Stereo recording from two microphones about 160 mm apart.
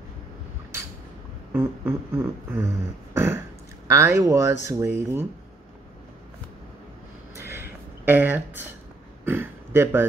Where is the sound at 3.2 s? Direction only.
15° right (ahead or behind).